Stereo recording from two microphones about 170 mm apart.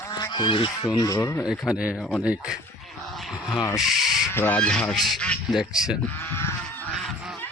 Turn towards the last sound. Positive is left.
turn(degrees=0)  # may be behind; listen again after turning